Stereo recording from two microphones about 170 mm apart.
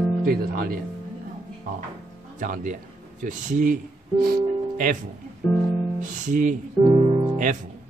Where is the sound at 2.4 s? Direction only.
50° right (ahead or behind).